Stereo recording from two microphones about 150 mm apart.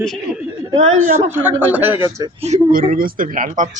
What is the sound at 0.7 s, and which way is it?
Speech, 50° right (ahead or behind).